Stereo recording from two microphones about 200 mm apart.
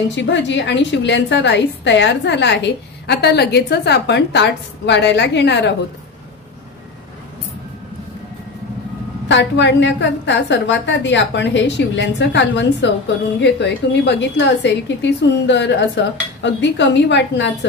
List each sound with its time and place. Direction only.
0.1 s a woman's voice: 65° left (ahead or behind)
9.3 s a woman's voice: 60° left (ahead or behind)